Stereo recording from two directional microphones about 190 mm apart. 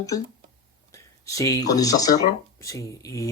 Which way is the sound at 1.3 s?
15° left (ahead or behind).